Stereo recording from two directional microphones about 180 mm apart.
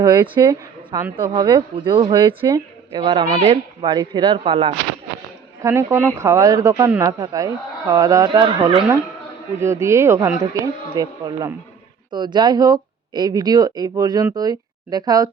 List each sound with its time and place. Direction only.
0.0 s speech: 25° right (ahead or behind)
4.4 s speech: 35° right (ahead or behind)
5.6 s speech: 15° right (ahead or behind)
9.6 s speech: 15° right (ahead or behind)